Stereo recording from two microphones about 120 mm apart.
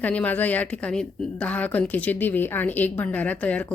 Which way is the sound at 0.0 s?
15° left (ahead or behind).